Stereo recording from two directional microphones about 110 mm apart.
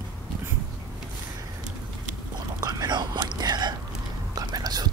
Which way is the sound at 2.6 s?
35° right (ahead or behind).